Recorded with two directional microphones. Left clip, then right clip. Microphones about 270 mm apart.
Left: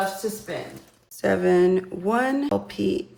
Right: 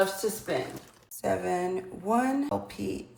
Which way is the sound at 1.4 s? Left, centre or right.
Left.